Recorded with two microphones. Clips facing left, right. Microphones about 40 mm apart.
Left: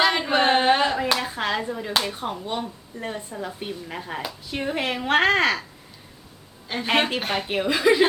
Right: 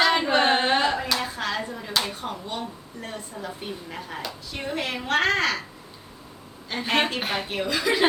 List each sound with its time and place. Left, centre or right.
0.0 s hands: centre
1.1 s a sound: centre
2.5 s speech: centre
6.7 s speech: centre
7.2 s speech: centre
7.4 s speech: centre